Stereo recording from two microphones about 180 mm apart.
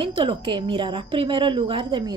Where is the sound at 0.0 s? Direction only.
30° right (ahead or behind).